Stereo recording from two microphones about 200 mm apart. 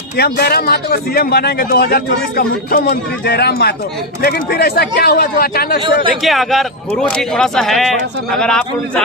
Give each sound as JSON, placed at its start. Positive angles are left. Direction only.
{"t": 0.2, "sound": "a man's voice", "side_deg": 50}
{"t": 6.2, "sound": "speech", "side_deg": 0}